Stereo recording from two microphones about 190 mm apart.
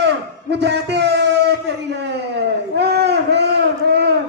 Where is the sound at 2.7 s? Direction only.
60° right (ahead or behind).